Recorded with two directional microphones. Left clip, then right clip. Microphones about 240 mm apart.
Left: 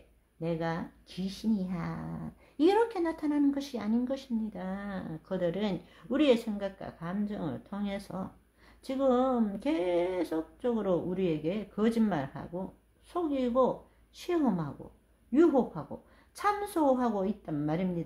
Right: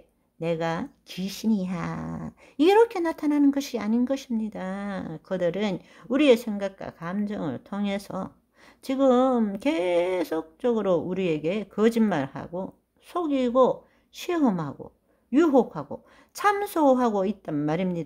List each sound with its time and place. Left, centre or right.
0.4 s speech: right